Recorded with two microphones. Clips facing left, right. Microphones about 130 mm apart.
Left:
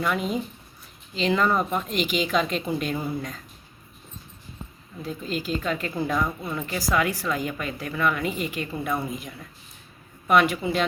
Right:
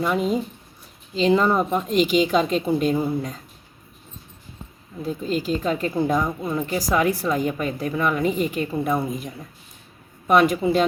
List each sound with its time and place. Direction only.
0.0 s a woman's voice: 30° right (ahead or behind)
5.0 s a woman's voice: 35° right (ahead or behind)
9.0 s a woman's voice: 45° right (ahead or behind)